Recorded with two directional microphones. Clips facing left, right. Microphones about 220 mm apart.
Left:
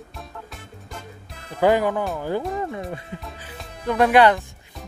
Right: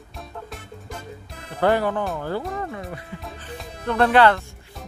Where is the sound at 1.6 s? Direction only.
15° left (ahead or behind).